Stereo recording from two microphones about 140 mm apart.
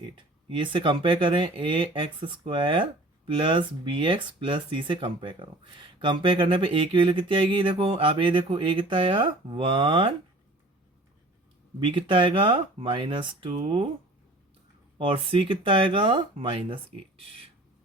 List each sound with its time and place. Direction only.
0.5 s speech: 35° right (ahead or behind)
11.8 s speech: 35° right (ahead or behind)
14.9 s speech: 40° right (ahead or behind)